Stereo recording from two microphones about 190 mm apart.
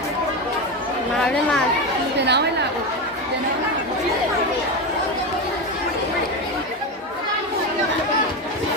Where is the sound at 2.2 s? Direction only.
60° right (ahead or behind).